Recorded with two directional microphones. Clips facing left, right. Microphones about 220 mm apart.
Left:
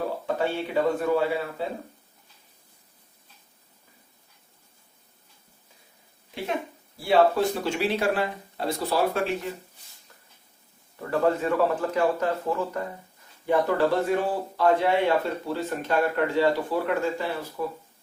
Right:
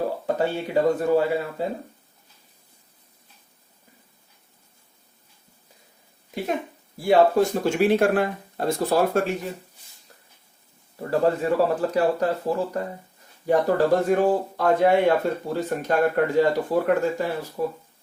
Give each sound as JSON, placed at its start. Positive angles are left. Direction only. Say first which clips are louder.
{"t": 0.3, "sound": "speech", "louder": "right 2 dB", "side_deg": -40}
{"t": 7.0, "sound": "speech", "louder": "right 3 dB", "side_deg": -45}
{"t": 11.0, "sound": "speech", "louder": "right 2 dB", "side_deg": -35}